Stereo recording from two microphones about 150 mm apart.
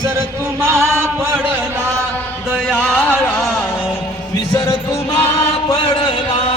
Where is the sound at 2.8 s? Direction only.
10° left (ahead or behind).